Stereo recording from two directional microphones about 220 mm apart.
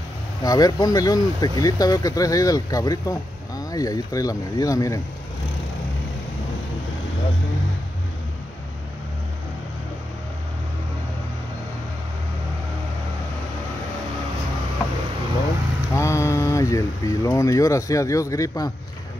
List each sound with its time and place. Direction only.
0.4 s speech: 15° left (ahead or behind)
15.9 s speech: 15° left (ahead or behind)